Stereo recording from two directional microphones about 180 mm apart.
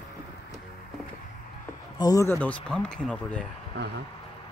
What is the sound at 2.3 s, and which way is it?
Speech, 5° left (ahead or behind).